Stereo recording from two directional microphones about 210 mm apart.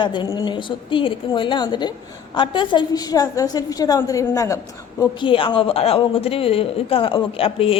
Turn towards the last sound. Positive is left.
turn(degrees=25)  # may be behind; listen again after turning